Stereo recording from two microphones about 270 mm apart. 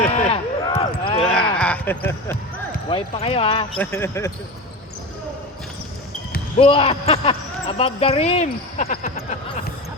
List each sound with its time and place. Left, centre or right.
0.1 s a sound: left
1.2 s a sound: centre
1.5 s speech: centre
2.9 s speech: left
3.8 s speech: centre
6.6 s speech: left